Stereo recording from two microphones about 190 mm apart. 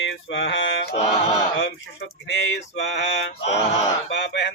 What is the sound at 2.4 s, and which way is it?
Male singing, 70° left (ahead or behind).